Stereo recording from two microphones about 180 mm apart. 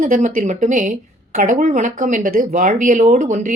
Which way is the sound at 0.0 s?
45° right (ahead or behind).